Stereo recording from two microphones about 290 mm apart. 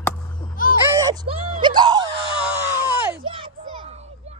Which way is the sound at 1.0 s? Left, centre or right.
Centre.